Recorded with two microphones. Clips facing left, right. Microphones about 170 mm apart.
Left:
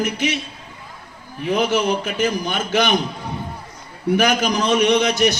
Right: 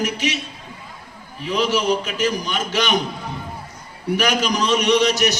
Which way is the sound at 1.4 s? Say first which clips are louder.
Left 1 dB; 55° left (ahead or behind).